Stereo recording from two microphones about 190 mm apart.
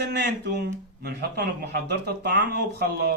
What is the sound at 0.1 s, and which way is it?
A man's voice, 65° right (ahead or behind).